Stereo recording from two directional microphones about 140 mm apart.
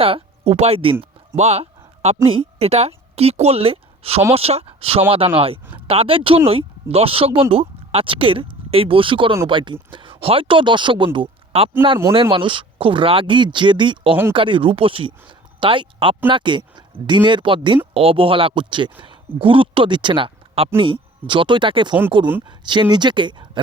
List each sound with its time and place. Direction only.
0.0 s speech: 45° right (ahead or behind)
1.4 s a sound: 50° right (ahead or behind)
2.2 s a woman's voice: 45° right (ahead or behind)